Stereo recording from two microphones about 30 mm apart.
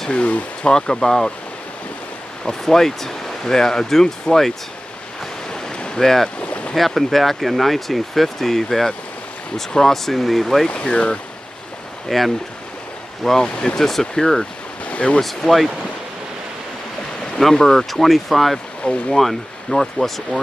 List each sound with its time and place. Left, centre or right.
0.1 s speech: left
0.6 s speech: left
2.6 s speech: centre
5.9 s speech: centre
6.4 s boat: left
7.0 s speech: centre
10.7 s speech: left
12.1 s speech: centre
14.9 s speech: left
15.2 s speech: centre
17.4 s speech: centre
17.9 s speech: centre